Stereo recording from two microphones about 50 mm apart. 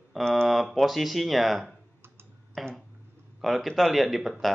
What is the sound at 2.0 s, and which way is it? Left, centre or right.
Clicking, right.